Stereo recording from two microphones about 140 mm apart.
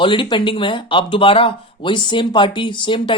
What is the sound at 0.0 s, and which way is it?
Speech, 35° left (ahead or behind).